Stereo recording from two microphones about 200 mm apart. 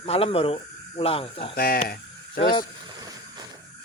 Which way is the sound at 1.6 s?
45° left (ahead or behind).